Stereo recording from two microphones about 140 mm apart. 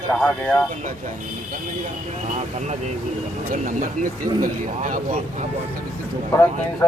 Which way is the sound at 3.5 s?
65° right (ahead or behind).